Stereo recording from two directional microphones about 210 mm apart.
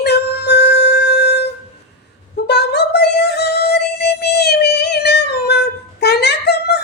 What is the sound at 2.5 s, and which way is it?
Music, 50° left (ahead or behind).